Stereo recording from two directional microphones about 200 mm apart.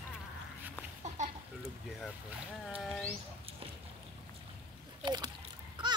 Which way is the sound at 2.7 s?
5° left (ahead or behind).